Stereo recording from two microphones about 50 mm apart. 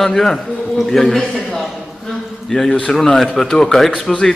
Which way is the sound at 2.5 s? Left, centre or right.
Centre.